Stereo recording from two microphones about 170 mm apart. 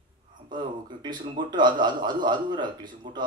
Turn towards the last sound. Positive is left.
turn(degrees=-25)  # may be behind; listen again after turning